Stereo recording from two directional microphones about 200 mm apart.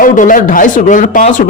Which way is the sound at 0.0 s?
40° left (ahead or behind).